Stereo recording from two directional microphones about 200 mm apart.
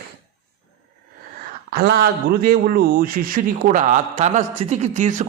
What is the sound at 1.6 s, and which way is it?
A man's voice, 50° right (ahead or behind).